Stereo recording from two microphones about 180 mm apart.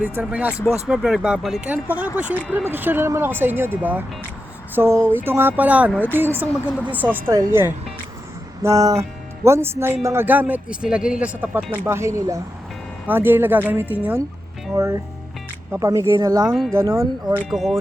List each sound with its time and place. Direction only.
0.0 s speech: 10° right (ahead or behind)
16.5 s speech: centre (ahead or behind)
16.7 s speech: 15° right (ahead or behind)
17.5 s speech: centre (ahead or behind)